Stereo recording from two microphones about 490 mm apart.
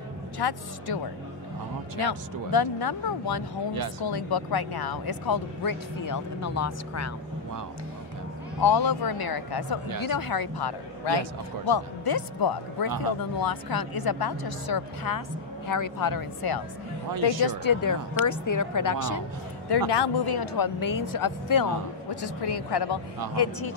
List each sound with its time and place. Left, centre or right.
0.4 s speech: left
2.0 s speech: left
8.5 s a woman's voice: left
19.7 s speech: left
22.1 s speech: left